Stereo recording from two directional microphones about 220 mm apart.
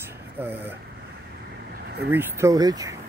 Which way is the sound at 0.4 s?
10° right (ahead or behind).